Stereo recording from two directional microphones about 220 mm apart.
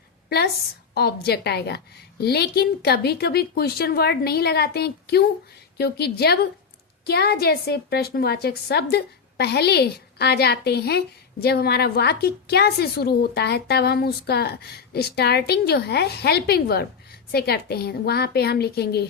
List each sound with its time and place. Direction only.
0.3 s a woman's voice: 45° left (ahead or behind)